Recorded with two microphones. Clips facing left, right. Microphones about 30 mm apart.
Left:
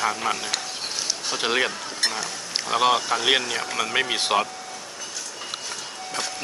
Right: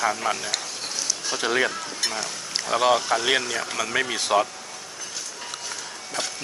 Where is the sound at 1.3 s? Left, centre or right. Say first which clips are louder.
Even; centre.